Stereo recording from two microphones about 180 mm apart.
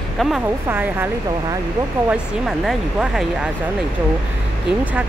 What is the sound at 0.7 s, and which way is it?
Speech, 10° right (ahead or behind).